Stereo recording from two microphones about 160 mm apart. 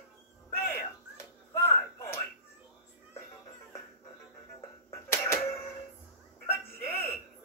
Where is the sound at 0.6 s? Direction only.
15° left (ahead or behind).